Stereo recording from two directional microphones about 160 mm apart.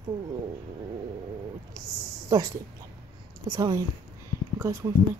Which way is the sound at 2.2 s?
25° right (ahead or behind).